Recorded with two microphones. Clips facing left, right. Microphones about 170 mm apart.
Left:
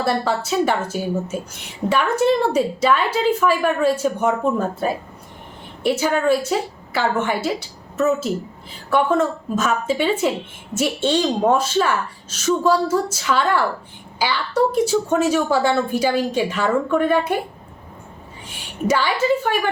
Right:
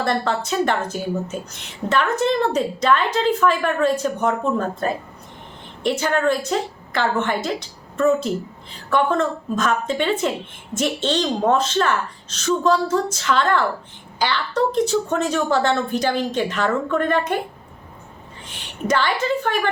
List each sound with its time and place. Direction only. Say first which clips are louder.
0.0 s a woman's voice: left 1 dB; 5° left (ahead or behind)
18.4 s a woman's voice: left 2 dB; 10° left (ahead or behind)